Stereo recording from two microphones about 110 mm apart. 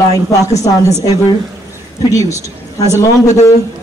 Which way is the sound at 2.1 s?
30° left (ahead or behind).